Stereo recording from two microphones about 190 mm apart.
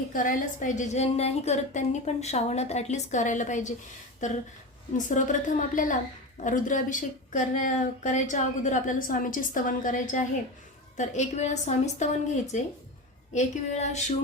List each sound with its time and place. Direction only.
0.1 s a woman's voice: 45° left (ahead or behind)
4.9 s a woman's voice: 40° left (ahead or behind)